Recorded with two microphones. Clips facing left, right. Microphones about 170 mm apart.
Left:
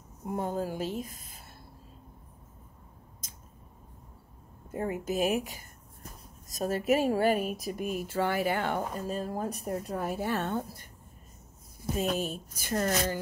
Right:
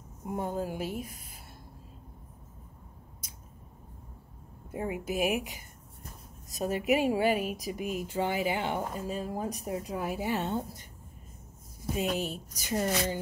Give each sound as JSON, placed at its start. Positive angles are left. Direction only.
{"t": 0.3, "sound": "a woman's voice", "side_deg": -10}
{"t": 4.6, "sound": "a woman's voice", "side_deg": -10}
{"t": 6.6, "sound": "a woman's voice", "side_deg": -15}
{"t": 7.2, "sound": "speech", "side_deg": 40}
{"t": 7.5, "sound": "a woman's voice", "side_deg": -15}
{"t": 11.9, "sound": "a woman's voice", "side_deg": -15}